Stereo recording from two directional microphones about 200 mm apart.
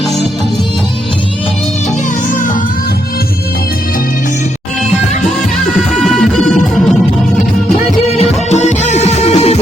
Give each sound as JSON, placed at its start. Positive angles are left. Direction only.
{"t": 6.1, "sound": "music", "side_deg": 0}
{"t": 8.0, "sound": "music", "side_deg": 35}